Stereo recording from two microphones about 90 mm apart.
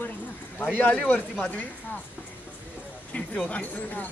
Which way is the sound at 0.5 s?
15° left (ahead or behind).